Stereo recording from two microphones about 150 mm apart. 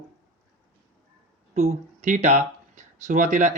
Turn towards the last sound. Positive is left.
turn(degrees=-55)  # may be behind; listen again after turning